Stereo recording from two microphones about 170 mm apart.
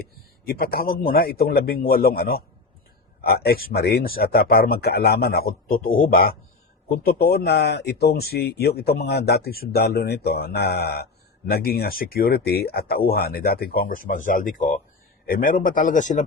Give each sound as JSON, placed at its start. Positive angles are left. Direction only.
{"t": 0.4, "sound": "speech", "side_deg": 60}